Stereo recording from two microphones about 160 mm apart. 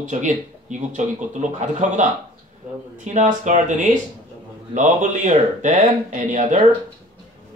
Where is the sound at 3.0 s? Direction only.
50° right (ahead or behind).